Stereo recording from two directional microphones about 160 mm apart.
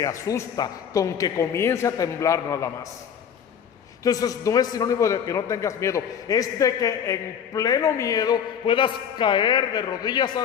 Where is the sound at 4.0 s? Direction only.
20° left (ahead or behind).